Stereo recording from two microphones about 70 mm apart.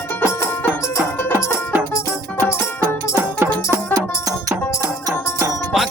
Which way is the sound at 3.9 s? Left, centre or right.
Right.